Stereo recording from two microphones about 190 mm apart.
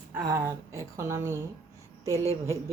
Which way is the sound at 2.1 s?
15° left (ahead or behind).